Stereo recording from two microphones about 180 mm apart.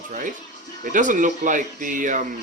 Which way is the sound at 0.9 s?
45° right (ahead or behind).